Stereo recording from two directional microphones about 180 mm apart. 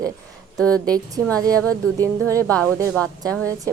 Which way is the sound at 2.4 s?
5° left (ahead or behind).